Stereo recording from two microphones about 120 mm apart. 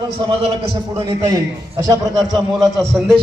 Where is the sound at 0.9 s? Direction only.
35° right (ahead or behind).